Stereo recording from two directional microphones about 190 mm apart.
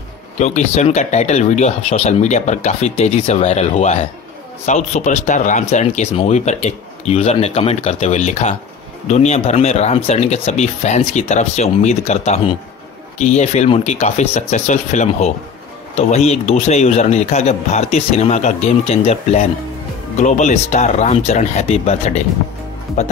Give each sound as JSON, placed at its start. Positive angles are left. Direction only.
{"t": 0.4, "sound": "speech", "side_deg": 35}